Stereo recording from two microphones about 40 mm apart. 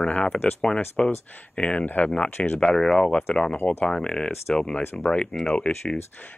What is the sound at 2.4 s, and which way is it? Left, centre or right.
Speech, left.